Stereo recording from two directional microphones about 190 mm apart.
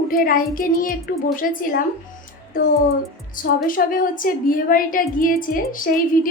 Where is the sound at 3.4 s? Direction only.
45° left (ahead or behind).